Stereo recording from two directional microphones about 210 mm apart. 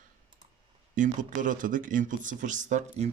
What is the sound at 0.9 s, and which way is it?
Speech, 35° right (ahead or behind).